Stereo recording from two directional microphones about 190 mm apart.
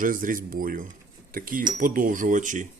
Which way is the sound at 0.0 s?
45° right (ahead or behind).